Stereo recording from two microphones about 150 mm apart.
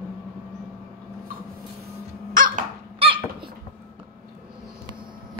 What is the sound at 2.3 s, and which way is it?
Crow, 65° right (ahead or behind).